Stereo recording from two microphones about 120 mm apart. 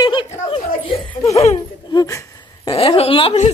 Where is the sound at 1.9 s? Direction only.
25° left (ahead or behind).